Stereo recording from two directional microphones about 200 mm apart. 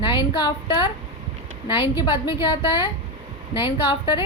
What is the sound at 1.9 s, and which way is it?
A woman's voice, 20° left (ahead or behind).